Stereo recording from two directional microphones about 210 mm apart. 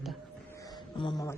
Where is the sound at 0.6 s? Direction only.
20° left (ahead or behind).